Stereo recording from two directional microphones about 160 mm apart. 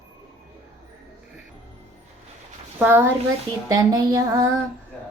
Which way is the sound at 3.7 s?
20° right (ahead or behind).